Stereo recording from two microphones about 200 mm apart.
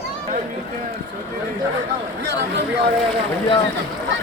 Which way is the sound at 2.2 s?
60° right (ahead or behind).